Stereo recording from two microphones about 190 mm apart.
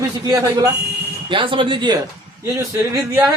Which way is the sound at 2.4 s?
15° right (ahead or behind).